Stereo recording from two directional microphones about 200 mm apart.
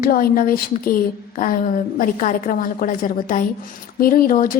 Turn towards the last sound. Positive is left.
turn(degrees=45)  # may be behind; listen again after turning